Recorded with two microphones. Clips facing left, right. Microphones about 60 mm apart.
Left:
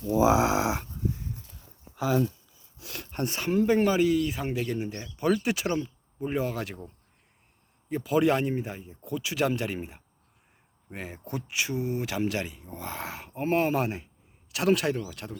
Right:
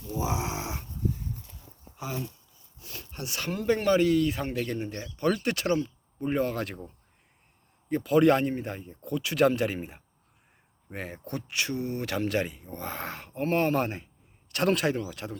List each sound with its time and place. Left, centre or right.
0.0 s speech: left
2.7 s a sound: left
3.1 s speech: left
3.4 s speech: left
3.7 s speech: centre